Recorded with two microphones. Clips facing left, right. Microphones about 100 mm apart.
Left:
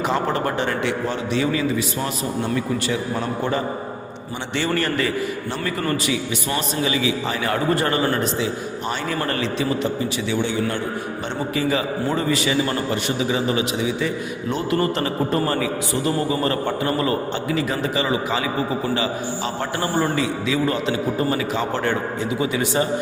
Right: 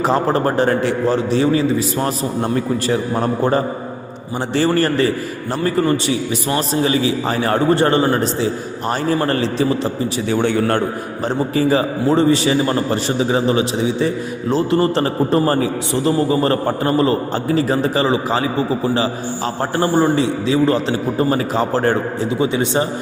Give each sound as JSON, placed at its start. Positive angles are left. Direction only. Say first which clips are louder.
{"t": 0.0, "sound": "a man's voice", "louder": "right 5 dB", "side_deg": -35}
{"t": 10.2, "sound": "a man's voice", "louder": "right 7 dB", "side_deg": -50}
{"t": 11.3, "sound": "a man's voice", "louder": "right 7 dB", "side_deg": -35}
{"t": 20.0, "sound": "a man's voice", "louder": "right 5 dB", "side_deg": -30}